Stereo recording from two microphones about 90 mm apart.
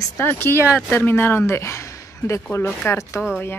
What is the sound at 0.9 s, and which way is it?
Speech, 25° left (ahead or behind).